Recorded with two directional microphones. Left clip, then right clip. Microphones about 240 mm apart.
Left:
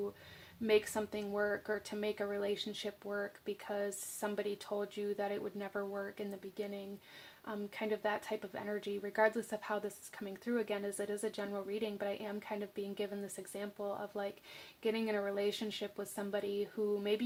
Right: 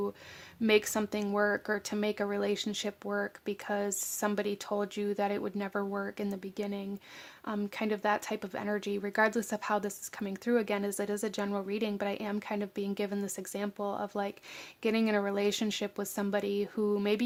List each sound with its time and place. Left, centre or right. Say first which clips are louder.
0.7 s speech: right 5 dB; right